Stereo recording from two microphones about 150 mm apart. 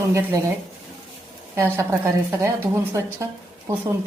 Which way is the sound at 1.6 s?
15° right (ahead or behind).